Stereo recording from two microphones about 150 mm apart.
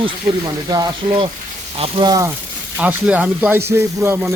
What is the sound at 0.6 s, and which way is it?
Speech, 25° right (ahead or behind).